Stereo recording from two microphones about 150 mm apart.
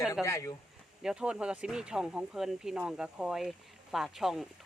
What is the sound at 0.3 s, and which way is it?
Speech, 20° left (ahead or behind).